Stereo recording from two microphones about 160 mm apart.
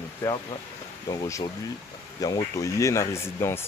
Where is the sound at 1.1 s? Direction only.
20° left (ahead or behind).